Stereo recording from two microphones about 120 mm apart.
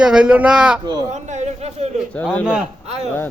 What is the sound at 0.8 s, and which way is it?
Speech, 30° right (ahead or behind).